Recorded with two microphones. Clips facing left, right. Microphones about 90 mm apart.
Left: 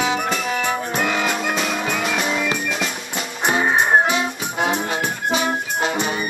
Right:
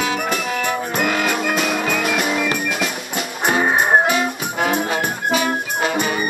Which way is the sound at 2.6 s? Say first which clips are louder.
Right 2 dB; 5° right (ahead or behind).